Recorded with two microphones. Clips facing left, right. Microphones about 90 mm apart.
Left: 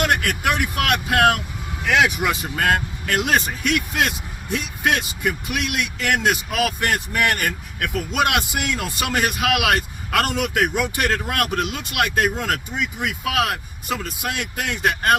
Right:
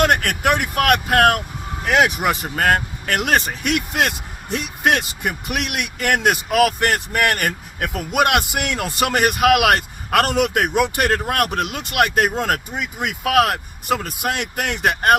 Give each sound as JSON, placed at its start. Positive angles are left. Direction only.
{"t": 0.2, "sound": "speech", "side_deg": -50}